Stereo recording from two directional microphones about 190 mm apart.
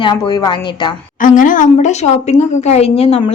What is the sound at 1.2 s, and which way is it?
Speech, 45° left (ahead or behind).